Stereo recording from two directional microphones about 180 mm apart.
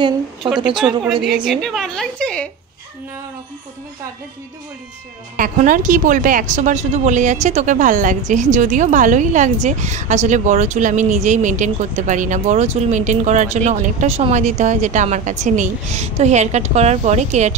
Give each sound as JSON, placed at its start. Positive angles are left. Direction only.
{"t": 1.4, "sound": "a woman's voice", "side_deg": 0}
{"t": 5.3, "sound": "speech", "side_deg": -50}